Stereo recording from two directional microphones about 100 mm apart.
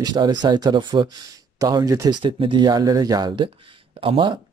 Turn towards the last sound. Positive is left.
turn(degrees=-60)  # may be behind; listen again after turning